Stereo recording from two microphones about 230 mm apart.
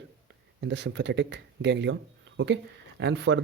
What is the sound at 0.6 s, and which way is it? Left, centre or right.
Speech, right.